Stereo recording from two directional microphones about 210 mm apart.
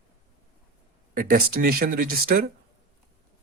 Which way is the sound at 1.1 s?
45° right (ahead or behind).